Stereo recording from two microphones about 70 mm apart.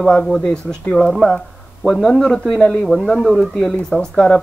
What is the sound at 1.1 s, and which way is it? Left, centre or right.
Speech, centre.